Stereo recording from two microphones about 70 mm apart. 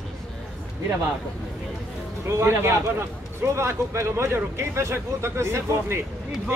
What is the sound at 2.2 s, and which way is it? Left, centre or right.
A man's voice, right.